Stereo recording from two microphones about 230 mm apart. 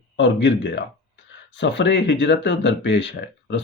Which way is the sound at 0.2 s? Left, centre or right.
Left.